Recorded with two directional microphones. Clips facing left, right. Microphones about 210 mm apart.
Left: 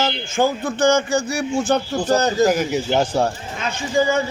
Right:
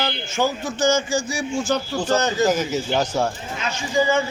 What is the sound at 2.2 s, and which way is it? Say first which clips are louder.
Speech: left 3 dB; 35° left (ahead or behind).